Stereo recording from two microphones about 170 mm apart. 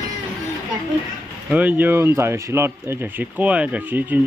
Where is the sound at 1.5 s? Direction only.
10° right (ahead or behind).